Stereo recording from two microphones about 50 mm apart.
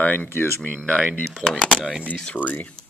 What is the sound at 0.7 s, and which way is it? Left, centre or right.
Speech, left.